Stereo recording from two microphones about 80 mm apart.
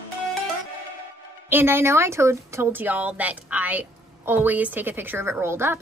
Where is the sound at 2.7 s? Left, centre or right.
Right.